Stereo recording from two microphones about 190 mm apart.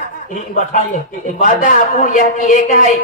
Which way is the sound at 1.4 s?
45° left (ahead or behind).